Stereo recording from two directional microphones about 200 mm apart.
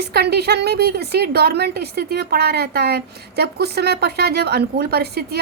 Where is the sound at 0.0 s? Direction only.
55° right (ahead or behind).